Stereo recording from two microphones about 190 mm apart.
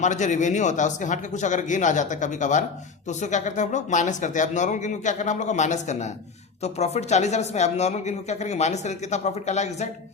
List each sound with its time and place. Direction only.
0.0 s speech: 40° left (ahead or behind)